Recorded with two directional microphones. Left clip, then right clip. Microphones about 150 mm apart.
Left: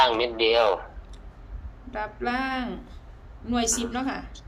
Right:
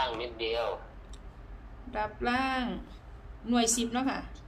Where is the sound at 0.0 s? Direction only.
90° left.